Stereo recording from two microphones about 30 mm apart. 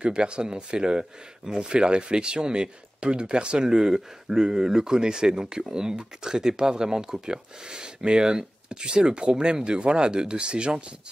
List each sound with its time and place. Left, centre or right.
0.0 s speech: right